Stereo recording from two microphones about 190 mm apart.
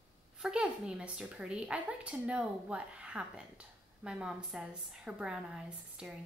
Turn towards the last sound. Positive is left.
turn(degrees=-5)  # may be behind; listen again after turning